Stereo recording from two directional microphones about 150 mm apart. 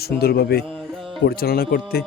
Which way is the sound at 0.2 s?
90° left.